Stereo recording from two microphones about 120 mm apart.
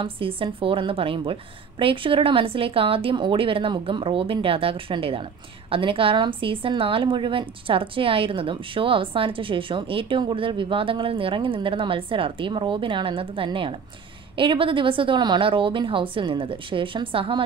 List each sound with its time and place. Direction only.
0.0 s a woman's voice: 50° right (ahead or behind)